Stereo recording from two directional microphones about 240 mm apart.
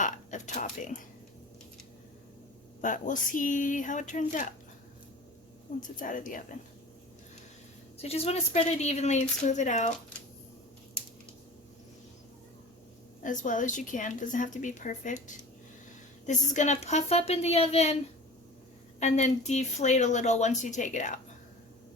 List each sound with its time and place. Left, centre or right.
0.0 s speech: left
2.8 s a woman's voice: left
6.0 s a woman's voice: left
8.0 s speech: left
13.2 s a woman's voice: left
16.2 s speech: left
18.9 s speech: left